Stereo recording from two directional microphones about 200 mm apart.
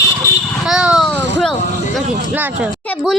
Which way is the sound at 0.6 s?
Centre (ahead or behind).